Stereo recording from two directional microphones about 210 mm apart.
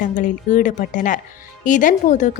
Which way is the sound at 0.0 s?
40° left (ahead or behind).